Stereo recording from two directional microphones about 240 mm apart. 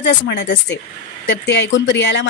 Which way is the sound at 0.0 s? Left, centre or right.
Left.